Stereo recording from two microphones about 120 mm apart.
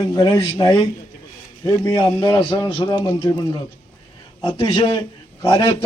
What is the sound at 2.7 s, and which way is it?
Speech, 45° left (ahead or behind).